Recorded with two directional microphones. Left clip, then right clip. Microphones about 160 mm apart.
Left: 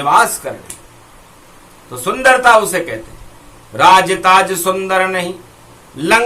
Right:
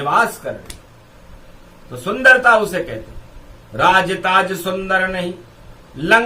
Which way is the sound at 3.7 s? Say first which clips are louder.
Left 5 dB; 20° right (ahead or behind).